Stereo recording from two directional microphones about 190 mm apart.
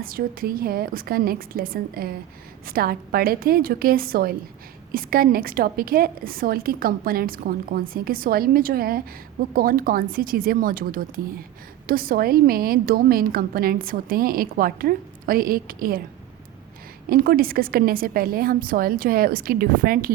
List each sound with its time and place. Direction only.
0.0 s a woman's voice: 50° right (ahead or behind)
17.1 s a woman's voice: 50° right (ahead or behind)